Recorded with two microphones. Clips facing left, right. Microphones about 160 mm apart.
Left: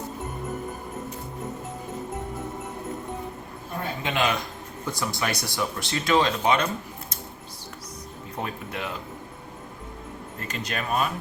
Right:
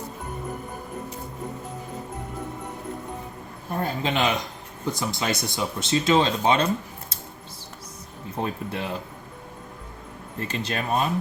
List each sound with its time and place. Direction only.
4.0 s speech: 25° right (ahead or behind)
8.4 s speech: 25° right (ahead or behind)
10.4 s speech: 30° right (ahead or behind)